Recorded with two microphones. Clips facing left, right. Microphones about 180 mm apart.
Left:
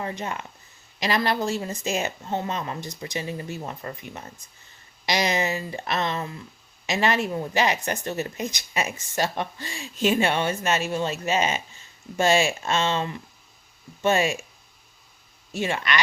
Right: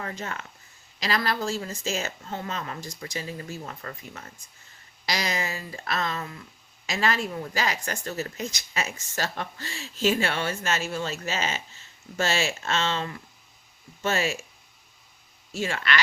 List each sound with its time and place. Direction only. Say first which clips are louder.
0.0 s speech: left 4 dB; 20° left (ahead or behind)
15.5 s speech: left 2 dB; 20° left (ahead or behind)